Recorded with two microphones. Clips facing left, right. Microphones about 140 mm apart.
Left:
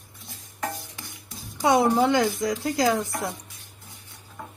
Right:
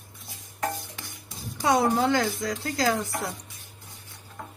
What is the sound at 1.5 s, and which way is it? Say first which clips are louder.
A woman's voice: left 3 dB; 20° left (ahead or behind).